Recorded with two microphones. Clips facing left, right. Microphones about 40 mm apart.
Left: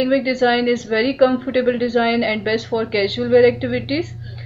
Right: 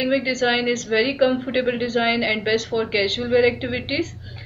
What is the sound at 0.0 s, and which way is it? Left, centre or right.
Speech, centre.